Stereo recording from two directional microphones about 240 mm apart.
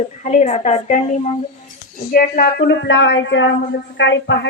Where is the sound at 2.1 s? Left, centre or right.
Left.